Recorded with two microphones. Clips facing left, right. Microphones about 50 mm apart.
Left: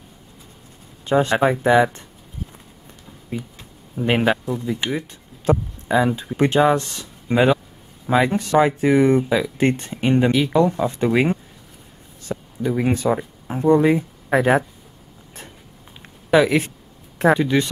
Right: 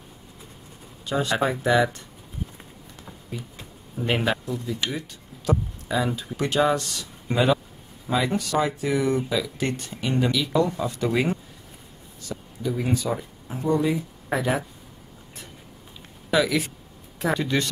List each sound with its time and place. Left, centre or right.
1.0 s speech: left
4.0 s speech: left
16.3 s speech: left
17.3 s speech: centre